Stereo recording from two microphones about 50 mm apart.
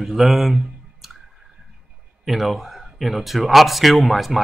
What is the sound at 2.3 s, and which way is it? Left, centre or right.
Speech, centre.